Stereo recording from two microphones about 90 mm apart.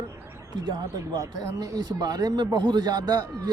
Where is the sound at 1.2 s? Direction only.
45° right (ahead or behind).